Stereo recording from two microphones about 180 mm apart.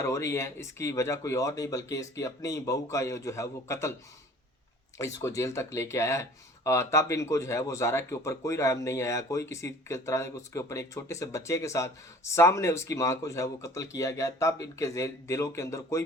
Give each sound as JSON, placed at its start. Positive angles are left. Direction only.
{"t": 0.0, "sound": "speech", "side_deg": 15}
{"t": 4.9, "sound": "speech", "side_deg": 15}